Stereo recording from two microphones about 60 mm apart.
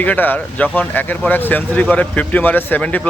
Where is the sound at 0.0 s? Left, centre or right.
Left.